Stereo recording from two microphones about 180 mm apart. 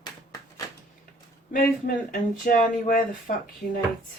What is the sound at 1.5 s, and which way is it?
Speech, 50° left (ahead or behind).